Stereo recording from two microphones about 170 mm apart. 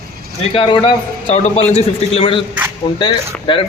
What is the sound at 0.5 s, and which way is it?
A man's voice, 30° left (ahead or behind).